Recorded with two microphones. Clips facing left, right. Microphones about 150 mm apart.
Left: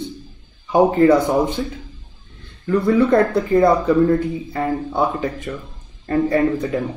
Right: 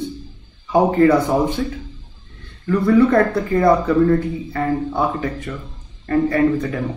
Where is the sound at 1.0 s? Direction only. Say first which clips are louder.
Even; 20° left (ahead or behind).